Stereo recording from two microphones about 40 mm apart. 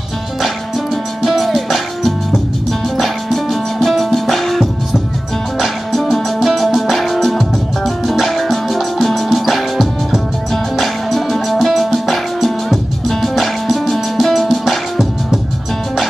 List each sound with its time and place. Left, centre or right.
1.2 s music: centre
6.4 s music: centre